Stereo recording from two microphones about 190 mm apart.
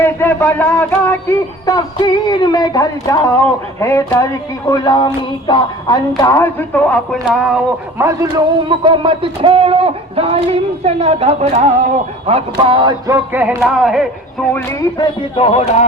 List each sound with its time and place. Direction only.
0.0 s speech: 10° left (ahead or behind)
7.9 s a man's voice: 15° right (ahead or behind)
8.8 s a man's voice: 25° right (ahead or behind)
13.3 s speech: 10° right (ahead or behind)
14.5 s speech: 15° left (ahead or behind); by 15.9 s 35° left (ahead or behind)